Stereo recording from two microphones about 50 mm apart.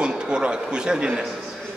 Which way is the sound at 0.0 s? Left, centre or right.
Centre.